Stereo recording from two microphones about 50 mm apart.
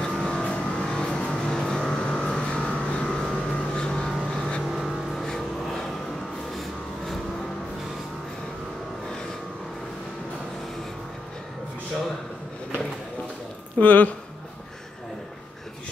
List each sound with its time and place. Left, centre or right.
0.0 s vehicle: centre
4.8 s vehicle: centre
13.7 s speech: left